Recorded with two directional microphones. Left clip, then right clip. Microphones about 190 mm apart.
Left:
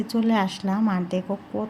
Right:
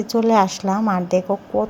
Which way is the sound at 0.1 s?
20° right (ahead or behind).